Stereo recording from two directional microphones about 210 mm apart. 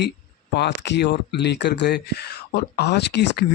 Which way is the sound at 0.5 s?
55° left (ahead or behind).